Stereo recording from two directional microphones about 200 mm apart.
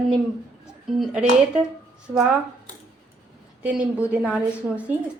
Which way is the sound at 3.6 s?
5° right (ahead or behind).